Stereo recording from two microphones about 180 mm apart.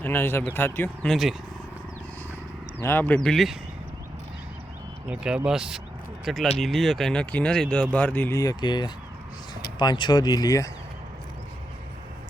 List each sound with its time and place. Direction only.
0.0 s speech: 10° left (ahead or behind)
1.1 s speech: centre (ahead or behind)
2.8 s speech: 10° left (ahead or behind)
3.2 s speech: centre (ahead or behind)
5.0 s speech: 5° right (ahead or behind); by 10.7 s 20° left (ahead or behind)